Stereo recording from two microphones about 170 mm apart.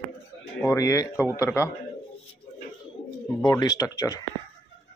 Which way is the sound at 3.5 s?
25° left (ahead or behind).